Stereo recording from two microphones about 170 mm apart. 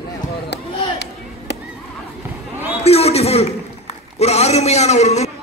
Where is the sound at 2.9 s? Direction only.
35° left (ahead or behind).